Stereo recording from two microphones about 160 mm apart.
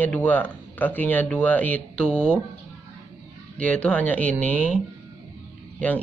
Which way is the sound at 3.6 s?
10° left (ahead or behind).